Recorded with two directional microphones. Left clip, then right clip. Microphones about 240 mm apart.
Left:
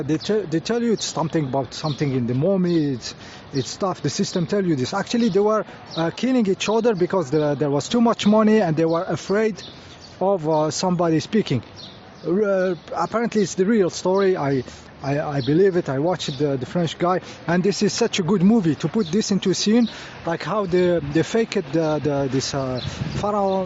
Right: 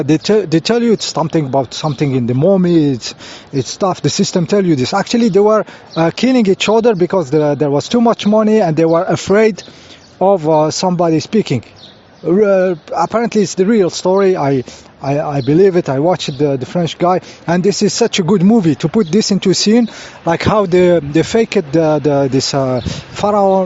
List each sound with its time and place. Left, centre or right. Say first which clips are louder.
0.0 s speech: right 10 dB; right